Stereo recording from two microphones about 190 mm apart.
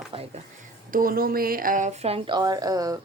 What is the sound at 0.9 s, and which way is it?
A woman's voice, 50° right (ahead or behind).